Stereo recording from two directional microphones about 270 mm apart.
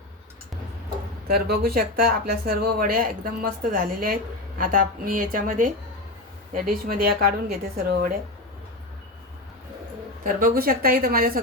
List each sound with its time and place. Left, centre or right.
1.3 s a woman's voice: right
10.2 s a woman's voice: right